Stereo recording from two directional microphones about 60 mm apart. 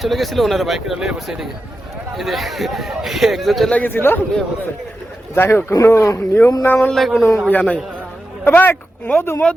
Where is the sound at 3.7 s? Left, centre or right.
Left.